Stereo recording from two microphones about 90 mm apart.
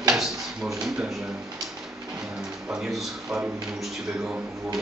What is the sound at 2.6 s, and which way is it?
Speech, 10° right (ahead or behind).